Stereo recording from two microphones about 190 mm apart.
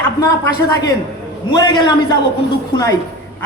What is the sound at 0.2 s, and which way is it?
Speech, 15° left (ahead or behind).